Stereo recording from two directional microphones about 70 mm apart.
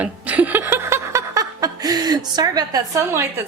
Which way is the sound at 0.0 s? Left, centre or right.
Right.